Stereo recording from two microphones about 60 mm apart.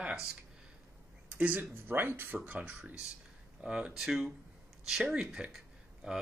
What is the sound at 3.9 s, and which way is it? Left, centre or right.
Speech, centre.